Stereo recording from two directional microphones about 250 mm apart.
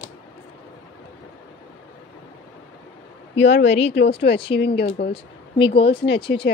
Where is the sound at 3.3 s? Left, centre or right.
Left.